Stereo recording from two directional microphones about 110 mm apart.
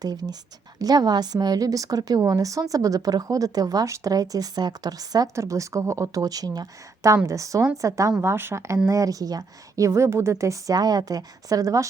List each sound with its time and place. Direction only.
0.0 s a woman's voice: 35° right (ahead or behind)